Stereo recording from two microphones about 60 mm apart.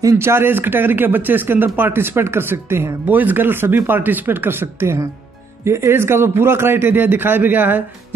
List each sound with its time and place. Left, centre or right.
0.2 s a man's voice: right
3.1 s a man's voice: right